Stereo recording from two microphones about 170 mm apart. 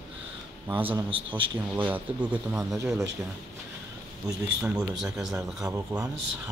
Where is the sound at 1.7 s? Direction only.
10° right (ahead or behind).